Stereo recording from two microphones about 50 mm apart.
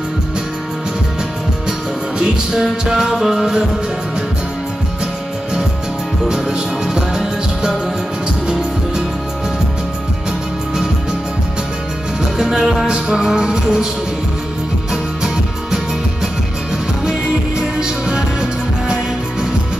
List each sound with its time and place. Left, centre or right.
2.1 s music: centre
6.2 s music: centre
12.4 s music: centre
17.6 s music: centre